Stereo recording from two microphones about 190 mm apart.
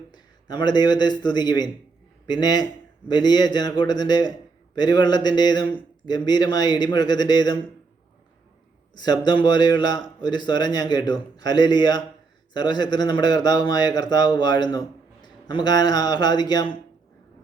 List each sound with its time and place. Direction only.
0.1 s a man's voice: 25° left (ahead or behind)
9.0 s speech: 20° left (ahead or behind)